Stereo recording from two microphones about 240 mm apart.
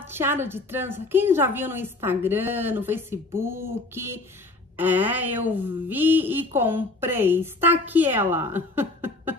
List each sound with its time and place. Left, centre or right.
0.0 s a woman's voice: centre